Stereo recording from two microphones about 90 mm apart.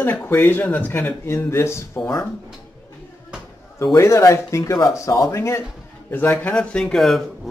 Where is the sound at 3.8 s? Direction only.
40° left (ahead or behind); by 6.5 s 25° left (ahead or behind).